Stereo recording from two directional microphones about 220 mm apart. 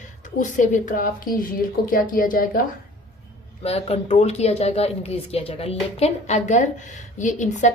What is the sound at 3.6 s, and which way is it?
A woman's voice, 25° left (ahead or behind).